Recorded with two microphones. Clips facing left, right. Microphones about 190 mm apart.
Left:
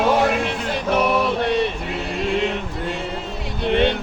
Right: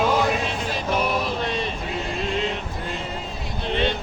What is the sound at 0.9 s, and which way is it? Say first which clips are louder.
Male singing: left 6 dB; 65° left (ahead or behind).